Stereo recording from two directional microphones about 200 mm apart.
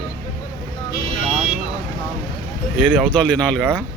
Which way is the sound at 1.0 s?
30° right (ahead or behind).